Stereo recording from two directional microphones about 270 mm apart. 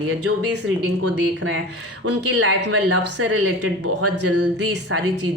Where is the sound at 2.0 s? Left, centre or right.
Right.